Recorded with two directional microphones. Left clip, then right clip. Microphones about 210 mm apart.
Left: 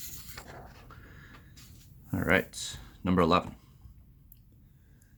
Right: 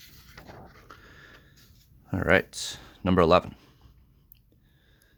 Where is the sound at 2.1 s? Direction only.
50° right (ahead or behind).